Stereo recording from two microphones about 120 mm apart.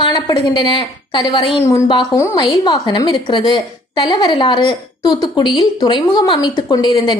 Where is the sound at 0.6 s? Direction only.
45° left (ahead or behind).